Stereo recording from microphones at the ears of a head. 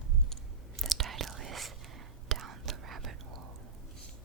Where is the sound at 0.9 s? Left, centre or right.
Right.